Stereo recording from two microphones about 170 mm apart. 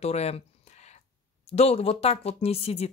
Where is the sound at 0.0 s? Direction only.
40° left (ahead or behind).